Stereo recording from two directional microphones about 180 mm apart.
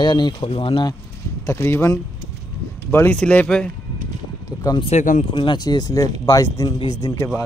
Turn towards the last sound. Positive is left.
turn(degrees=20)  # may be behind; listen again after turning